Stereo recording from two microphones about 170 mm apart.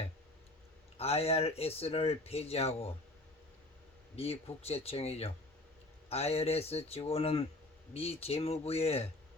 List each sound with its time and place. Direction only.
0.9 s speech: 35° left (ahead or behind)
4.1 s speech: 35° left (ahead or behind)